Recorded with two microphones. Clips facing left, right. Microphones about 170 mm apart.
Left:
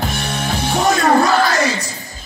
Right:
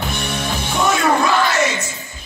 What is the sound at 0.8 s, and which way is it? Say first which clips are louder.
Yell: left 3 dB; 40° left (ahead or behind).